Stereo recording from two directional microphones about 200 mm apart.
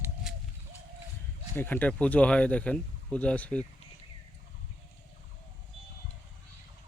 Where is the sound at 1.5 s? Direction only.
10° left (ahead or behind).